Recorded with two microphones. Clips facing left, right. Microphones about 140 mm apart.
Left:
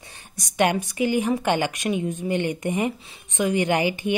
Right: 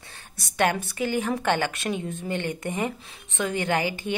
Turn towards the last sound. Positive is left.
turn(degrees=15)  # may be behind; listen again after turning